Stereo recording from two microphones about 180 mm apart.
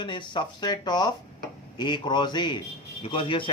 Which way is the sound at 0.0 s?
25° left (ahead or behind).